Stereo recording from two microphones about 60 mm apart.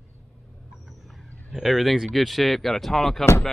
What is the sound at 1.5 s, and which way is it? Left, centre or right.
Speech, centre.